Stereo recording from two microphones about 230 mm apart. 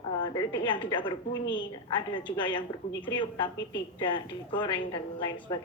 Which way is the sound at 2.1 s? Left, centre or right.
Left.